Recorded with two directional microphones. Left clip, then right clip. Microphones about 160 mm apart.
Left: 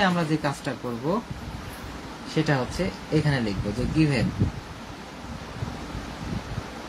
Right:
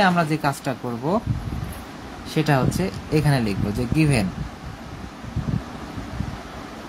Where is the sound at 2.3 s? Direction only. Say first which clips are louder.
Right 4 dB; 50° right (ahead or behind).